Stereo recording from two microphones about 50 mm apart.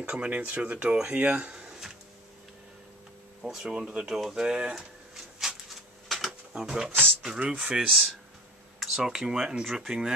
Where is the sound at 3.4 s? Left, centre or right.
Centre.